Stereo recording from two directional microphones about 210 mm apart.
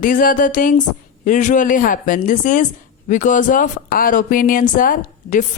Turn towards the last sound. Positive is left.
turn(degrees=40)  # may be behind; listen again after turning